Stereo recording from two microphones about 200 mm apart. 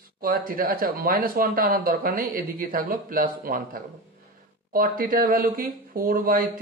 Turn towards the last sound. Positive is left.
turn(degrees=-45)  # may be behind; listen again after turning